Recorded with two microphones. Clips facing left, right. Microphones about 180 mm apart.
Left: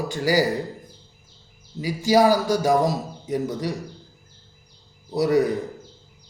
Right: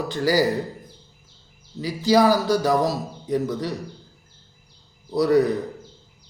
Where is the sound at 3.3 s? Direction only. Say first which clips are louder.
Right 1 dB; 10° left (ahead or behind).